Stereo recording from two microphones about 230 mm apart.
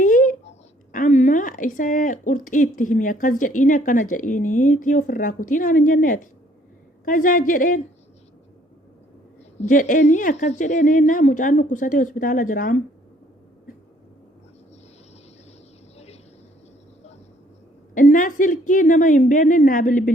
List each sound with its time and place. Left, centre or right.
0.0 s a sound: left
0.9 s speech: left
9.6 s speech: left
17.9 s speech: left